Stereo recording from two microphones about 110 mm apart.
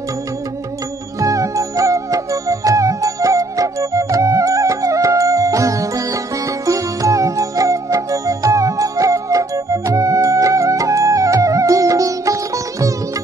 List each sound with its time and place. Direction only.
1.2 s music: 30° right (ahead or behind)